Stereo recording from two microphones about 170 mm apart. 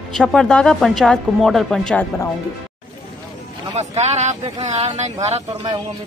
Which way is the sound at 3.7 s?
40° right (ahead or behind).